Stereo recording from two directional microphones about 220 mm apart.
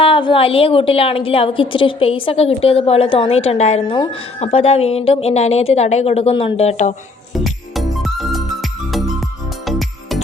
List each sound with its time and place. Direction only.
0.0 s a woman's voice: 25° left (ahead or behind)
7.3 s music: centre (ahead or behind)
9.6 s music: centre (ahead or behind)